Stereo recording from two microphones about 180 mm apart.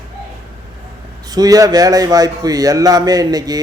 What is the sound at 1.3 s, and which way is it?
Speech, 20° right (ahead or behind).